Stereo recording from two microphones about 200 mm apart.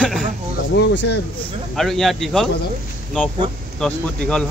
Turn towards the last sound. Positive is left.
turn(degrees=5)  # may be behind; listen again after turning